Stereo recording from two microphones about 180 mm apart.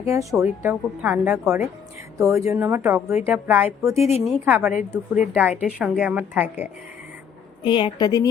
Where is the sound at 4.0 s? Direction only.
35° left (ahead or behind).